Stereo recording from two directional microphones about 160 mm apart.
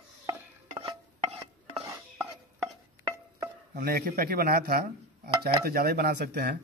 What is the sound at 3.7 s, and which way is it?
Speech, 65° right (ahead or behind).